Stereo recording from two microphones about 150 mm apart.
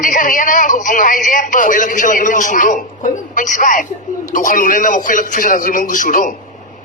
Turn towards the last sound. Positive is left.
turn(degrees=60)  # may be behind; listen again after turning